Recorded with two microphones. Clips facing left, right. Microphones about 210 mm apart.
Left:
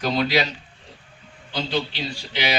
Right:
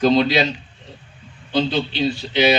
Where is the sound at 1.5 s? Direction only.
25° right (ahead or behind).